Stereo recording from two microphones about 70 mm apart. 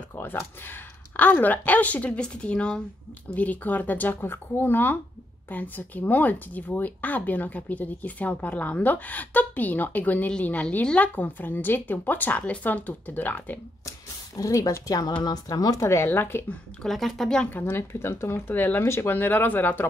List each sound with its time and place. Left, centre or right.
0.1 s speech: left
13.8 s speech: left
16.8 s speech: centre
17.5 s speech: left